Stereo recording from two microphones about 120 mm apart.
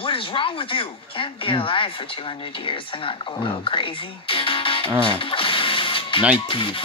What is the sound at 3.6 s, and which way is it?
Speech, 45° left (ahead or behind).